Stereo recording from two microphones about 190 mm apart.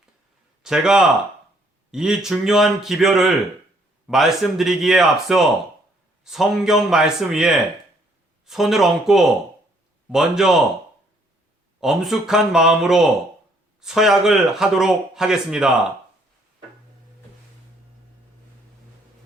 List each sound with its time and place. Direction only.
0.6 s speech: 5° right (ahead or behind)
11.8 s speech: centre (ahead or behind)